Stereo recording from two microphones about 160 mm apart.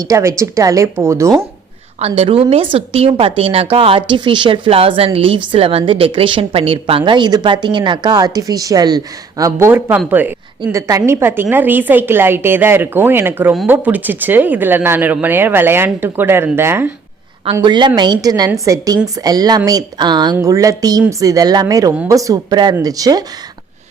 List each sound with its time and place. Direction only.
0.0 s a woman's voice: 20° right (ahead or behind)
2.0 s a woman's voice: 40° right (ahead or behind); by 16.9 s 15° right (ahead or behind)
17.5 s a woman's voice: 25° right (ahead or behind)